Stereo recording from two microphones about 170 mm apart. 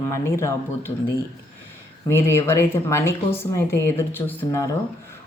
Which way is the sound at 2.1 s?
15° left (ahead or behind).